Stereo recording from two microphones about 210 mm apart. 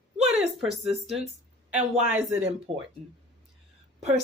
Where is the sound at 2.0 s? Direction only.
10° right (ahead or behind).